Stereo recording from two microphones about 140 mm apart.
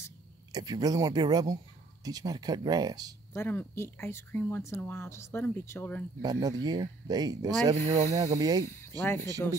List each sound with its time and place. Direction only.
0.5 s speech: 30° right (ahead or behind)
3.3 s speech: 15° left (ahead or behind)
6.2 s speech: 30° right (ahead or behind)
7.7 s speech: 55° right (ahead or behind)
8.4 s speech: 25° right (ahead or behind)
8.6 s speech: 20° left (ahead or behind)